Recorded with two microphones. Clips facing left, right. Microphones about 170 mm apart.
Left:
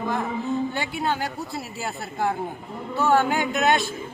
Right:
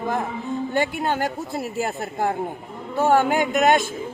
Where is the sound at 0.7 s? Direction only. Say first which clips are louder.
Right 4 dB; 50° right (ahead or behind).